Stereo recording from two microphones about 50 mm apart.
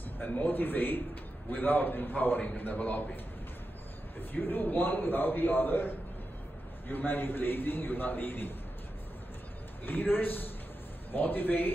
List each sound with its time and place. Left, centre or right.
0.3 s a man's voice: left
4.2 s a man's voice: left
6.9 s a man's voice: left
9.8 s a man's voice: left